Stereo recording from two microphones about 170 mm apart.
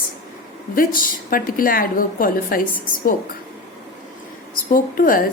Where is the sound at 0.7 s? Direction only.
55° left (ahead or behind).